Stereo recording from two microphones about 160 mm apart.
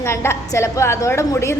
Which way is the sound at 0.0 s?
15° left (ahead or behind).